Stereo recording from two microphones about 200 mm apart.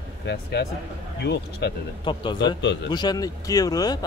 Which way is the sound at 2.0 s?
25° left (ahead or behind).